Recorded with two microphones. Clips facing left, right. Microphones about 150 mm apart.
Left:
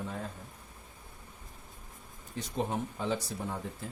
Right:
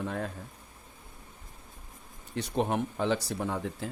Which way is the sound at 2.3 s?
70° right (ahead or behind).